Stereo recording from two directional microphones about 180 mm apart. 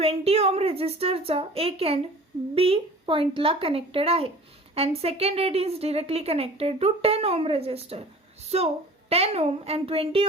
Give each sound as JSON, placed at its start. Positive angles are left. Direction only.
{"t": 0.0, "sound": "a woman's voice", "side_deg": -35}